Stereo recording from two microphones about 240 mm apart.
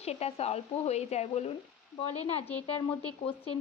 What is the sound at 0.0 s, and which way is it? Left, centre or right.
A woman's voice, left.